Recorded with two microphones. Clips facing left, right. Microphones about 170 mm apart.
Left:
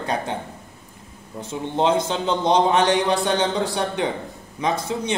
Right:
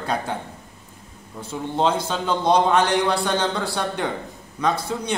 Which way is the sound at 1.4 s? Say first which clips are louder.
Even; 20° left (ahead or behind).